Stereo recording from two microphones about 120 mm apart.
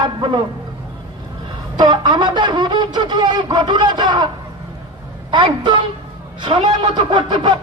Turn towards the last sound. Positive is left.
turn(degrees=-40)  # may be behind; listen again after turning